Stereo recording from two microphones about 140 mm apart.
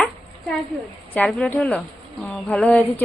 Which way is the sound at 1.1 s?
10° left (ahead or behind).